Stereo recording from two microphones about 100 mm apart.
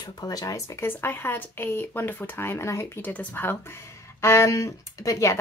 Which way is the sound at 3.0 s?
15° left (ahead or behind).